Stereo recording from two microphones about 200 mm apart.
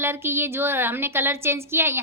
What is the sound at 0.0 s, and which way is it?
A woman's voice, 10° right (ahead or behind).